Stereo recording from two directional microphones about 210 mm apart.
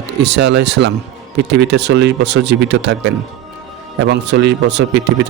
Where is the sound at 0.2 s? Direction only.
55° right (ahead or behind).